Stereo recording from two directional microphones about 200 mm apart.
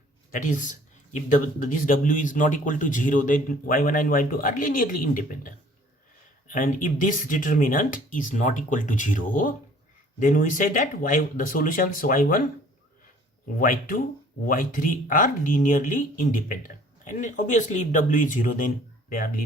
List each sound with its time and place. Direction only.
0.3 s speech: 40° left (ahead or behind)
13.6 s speech: 40° left (ahead or behind)